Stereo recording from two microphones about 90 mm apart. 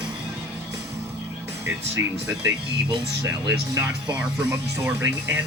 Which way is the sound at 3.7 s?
15° right (ahead or behind).